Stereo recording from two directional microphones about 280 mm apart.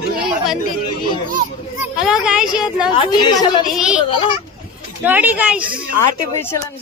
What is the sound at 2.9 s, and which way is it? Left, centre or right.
Speech, centre.